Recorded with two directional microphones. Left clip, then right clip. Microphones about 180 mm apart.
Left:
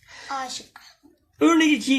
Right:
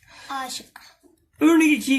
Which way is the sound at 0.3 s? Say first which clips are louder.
Even; 45° right (ahead or behind).